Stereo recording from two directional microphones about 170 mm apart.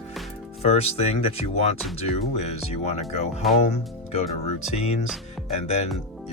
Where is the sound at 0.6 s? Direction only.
35° left (ahead or behind).